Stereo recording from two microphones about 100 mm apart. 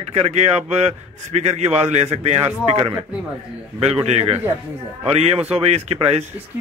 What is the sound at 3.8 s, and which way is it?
Speech, 90° right.